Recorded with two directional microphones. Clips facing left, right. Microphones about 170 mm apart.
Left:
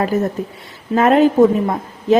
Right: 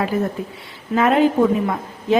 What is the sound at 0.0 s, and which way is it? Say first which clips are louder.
A woman's voice: left 3 dB; 40° left (ahead or behind).